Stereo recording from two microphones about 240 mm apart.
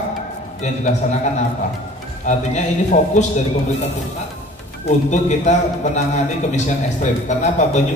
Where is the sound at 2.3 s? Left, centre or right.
Left.